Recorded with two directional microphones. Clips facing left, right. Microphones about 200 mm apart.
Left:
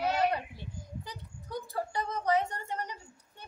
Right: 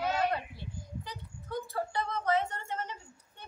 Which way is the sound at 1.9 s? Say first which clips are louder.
Left 1 dB; 15° left (ahead or behind).